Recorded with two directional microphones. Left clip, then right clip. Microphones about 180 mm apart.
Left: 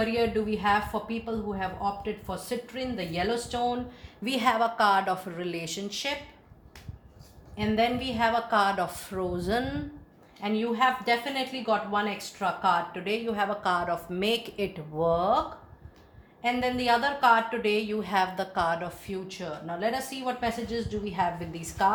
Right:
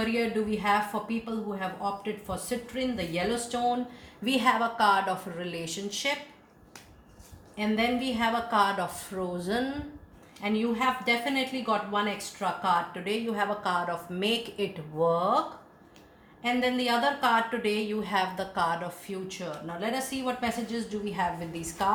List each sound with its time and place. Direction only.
0.0 s a woman's voice: 35° left (ahead or behind)
7.5 s a woman's voice: 35° left (ahead or behind)
16.4 s a woman's voice: 40° left (ahead or behind)